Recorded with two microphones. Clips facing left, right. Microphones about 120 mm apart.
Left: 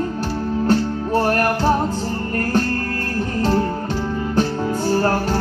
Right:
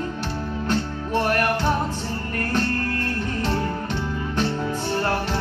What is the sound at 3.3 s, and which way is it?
Music, 30° left (ahead or behind).